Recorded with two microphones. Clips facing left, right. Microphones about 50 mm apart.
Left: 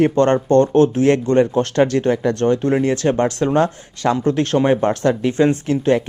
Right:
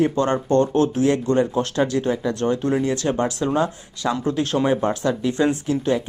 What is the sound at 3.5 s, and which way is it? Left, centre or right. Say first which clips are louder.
Speech: left 5 dB; left.